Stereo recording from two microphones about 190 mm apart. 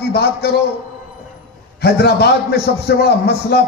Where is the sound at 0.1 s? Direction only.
60° left (ahead or behind).